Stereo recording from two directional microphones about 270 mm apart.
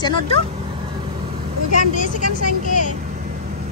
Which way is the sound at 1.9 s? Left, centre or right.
Left.